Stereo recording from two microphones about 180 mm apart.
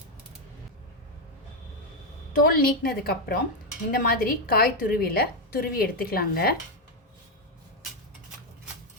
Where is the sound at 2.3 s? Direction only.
55° left (ahead or behind).